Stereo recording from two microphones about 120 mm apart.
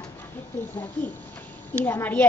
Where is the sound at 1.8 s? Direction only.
15° left (ahead or behind).